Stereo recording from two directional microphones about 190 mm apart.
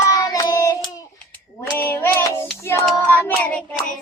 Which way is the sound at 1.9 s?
10° left (ahead or behind).